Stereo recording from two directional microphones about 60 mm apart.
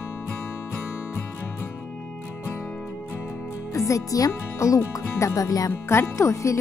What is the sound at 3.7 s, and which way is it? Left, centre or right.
Speech, left.